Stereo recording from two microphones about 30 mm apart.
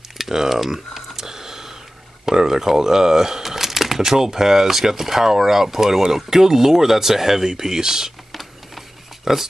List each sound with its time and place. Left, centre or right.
0.2 s typing: centre
2.2 s speech: centre
8.3 s a sound: centre
9.2 s speech: centre